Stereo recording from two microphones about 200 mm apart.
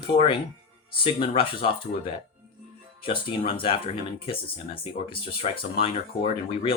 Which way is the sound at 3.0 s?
25° left (ahead or behind).